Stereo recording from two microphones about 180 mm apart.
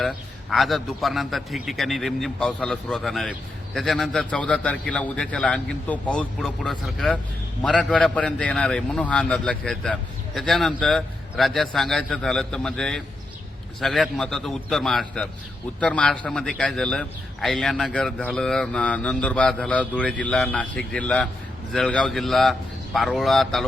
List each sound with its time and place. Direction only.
0.5 s a man's voice: centre (ahead or behind)